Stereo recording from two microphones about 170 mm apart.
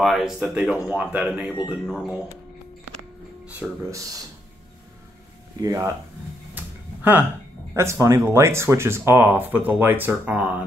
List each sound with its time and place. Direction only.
0.0 s speech: centre (ahead or behind)
3.4 s speech: 10° right (ahead or behind)
5.6 s speech: 20° right (ahead or behind)
6.5 s a sound: 10° right (ahead or behind)
7.7 s speech: 15° right (ahead or behind)